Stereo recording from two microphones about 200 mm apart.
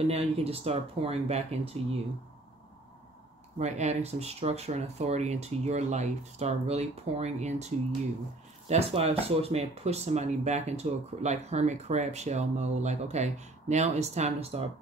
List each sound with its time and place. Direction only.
0.1 s speech: 30° right (ahead or behind)
3.5 s speech: 35° right (ahead or behind)